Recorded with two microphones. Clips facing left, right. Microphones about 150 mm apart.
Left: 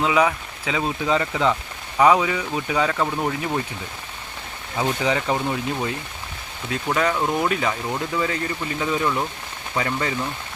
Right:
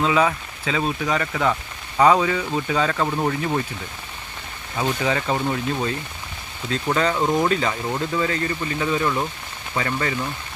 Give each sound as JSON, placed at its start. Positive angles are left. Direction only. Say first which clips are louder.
{"t": 0.0, "sound": "speech", "louder": "even", "side_deg": 15}
{"t": 2.0, "sound": "speech", "louder": "even", "side_deg": 10}
{"t": 4.8, "sound": "speech", "louder": "even", "side_deg": 15}
{"t": 8.3, "sound": "speech", "louder": "right 2 dB", "side_deg": 10}